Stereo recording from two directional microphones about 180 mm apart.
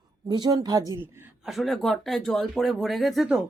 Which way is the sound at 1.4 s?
Centre (ahead or behind).